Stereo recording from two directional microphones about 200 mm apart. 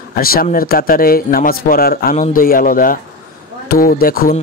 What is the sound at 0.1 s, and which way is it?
A man's voice, 50° left (ahead or behind).